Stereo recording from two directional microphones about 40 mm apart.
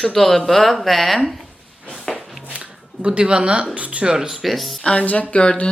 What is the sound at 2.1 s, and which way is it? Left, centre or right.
Walk, centre.